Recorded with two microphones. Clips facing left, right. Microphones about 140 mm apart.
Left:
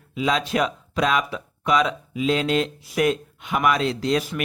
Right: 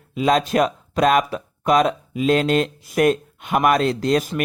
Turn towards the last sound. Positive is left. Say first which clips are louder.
# right 3 dB
turn(degrees=-45)  # may be behind; listen again after turning